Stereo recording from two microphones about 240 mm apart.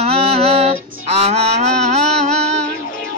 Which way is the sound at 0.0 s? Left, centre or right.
Right.